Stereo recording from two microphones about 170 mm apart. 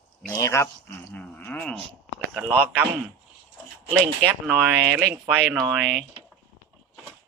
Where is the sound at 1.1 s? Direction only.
10° left (ahead or behind).